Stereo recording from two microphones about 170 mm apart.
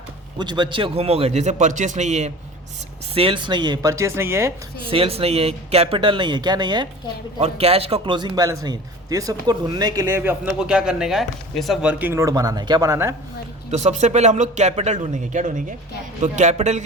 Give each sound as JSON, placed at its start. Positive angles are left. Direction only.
{"t": 0.3, "sound": "a man's voice", "side_deg": -25}
{"t": 3.2, "sound": "a man's voice", "side_deg": -30}
{"t": 4.9, "sound": "a man's voice", "side_deg": -35}
{"t": 7.3, "sound": "a man's voice", "side_deg": -35}
{"t": 13.7, "sound": "speech", "side_deg": -40}